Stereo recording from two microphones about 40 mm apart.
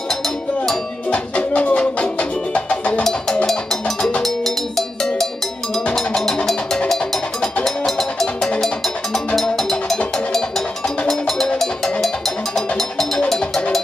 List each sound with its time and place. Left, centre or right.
1.1 s music: left
3.0 s music: centre
4.2 s cowbell: centre
7.6 s music: centre
11.1 s cowbell: centre